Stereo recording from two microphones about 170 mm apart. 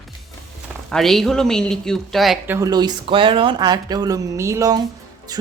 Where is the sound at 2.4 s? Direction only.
15° right (ahead or behind).